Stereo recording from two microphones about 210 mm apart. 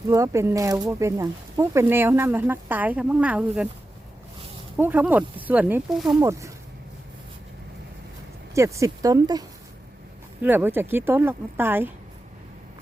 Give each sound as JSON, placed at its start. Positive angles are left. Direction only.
{"t": 0.1, "sound": "speech", "side_deg": -15}
{"t": 4.8, "sound": "speech", "side_deg": -10}
{"t": 8.5, "sound": "speech", "side_deg": -15}